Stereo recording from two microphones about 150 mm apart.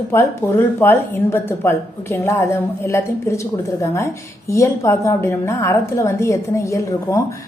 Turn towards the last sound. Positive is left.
turn(degrees=20)  # may be behind; listen again after turning